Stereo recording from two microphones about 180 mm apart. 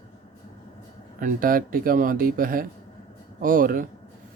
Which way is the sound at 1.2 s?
50° right (ahead or behind).